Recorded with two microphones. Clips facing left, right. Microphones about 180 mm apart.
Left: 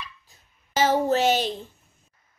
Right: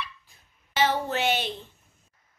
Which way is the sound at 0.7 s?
40° left (ahead or behind).